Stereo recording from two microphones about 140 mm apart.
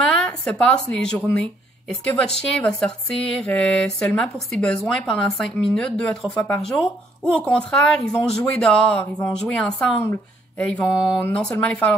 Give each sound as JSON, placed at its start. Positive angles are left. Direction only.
{"t": 0.0, "sound": "speech", "side_deg": 5}